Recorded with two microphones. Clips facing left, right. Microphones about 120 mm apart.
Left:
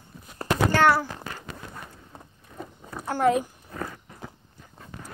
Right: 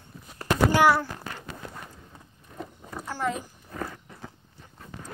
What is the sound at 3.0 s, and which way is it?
Speech, 55° left (ahead or behind).